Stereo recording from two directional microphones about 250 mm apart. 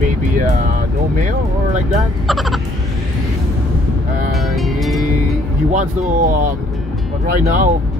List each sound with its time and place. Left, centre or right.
0.4 s speech: right
2.2 s speech: centre
4.3 s music: centre
5.7 s speech: right